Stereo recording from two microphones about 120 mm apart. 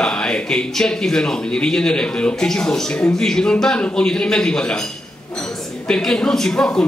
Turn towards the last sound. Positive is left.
turn(degrees=5)  # may be behind; listen again after turning